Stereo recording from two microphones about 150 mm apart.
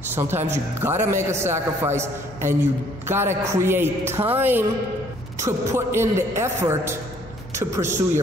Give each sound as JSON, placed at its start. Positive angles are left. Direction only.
{"t": 0.1, "sound": "a man's voice", "side_deg": -15}